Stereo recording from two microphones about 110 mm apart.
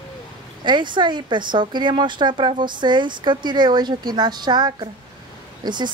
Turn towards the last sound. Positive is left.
turn(degrees=-40)  # may be behind; listen again after turning